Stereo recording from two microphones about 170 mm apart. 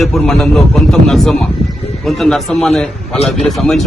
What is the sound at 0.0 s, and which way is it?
A man's voice, centre (ahead or behind).